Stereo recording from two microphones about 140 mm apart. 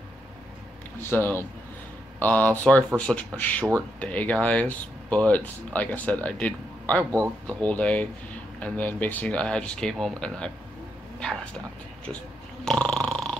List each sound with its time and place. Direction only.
1.1 s speech: 15° left (ahead or behind)
12.6 s snoring: 5° left (ahead or behind)